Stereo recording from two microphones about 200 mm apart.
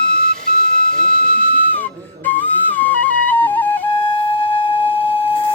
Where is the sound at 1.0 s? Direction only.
40° right (ahead or behind).